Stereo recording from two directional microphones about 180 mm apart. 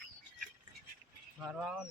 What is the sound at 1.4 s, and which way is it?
Speech, 5° right (ahead or behind).